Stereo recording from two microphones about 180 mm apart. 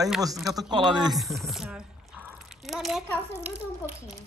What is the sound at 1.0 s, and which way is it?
Speech, centre (ahead or behind).